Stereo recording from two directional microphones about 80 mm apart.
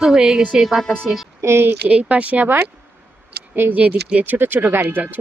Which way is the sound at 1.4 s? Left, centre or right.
Right.